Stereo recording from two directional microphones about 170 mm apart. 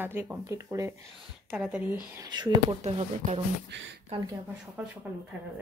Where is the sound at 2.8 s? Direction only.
40° right (ahead or behind).